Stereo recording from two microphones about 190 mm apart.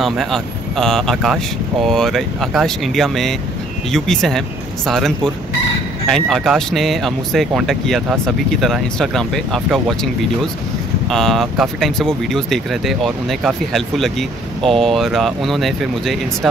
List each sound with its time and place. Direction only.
0.0 s speech: centre (ahead or behind)
11.1 s speech: centre (ahead or behind)